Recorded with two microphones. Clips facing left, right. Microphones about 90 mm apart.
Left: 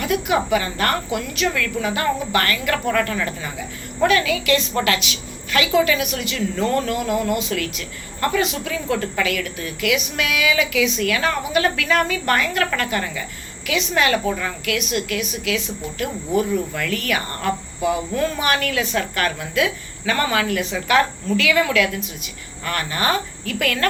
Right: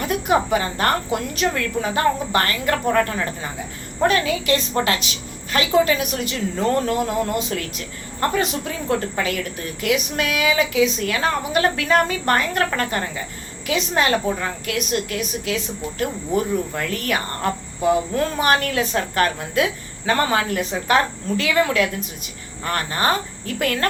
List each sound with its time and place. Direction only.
0.0 s speech: 40° right (ahead or behind)